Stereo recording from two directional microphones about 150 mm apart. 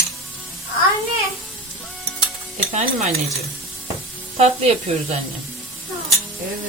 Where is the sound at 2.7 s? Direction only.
50° right (ahead or behind).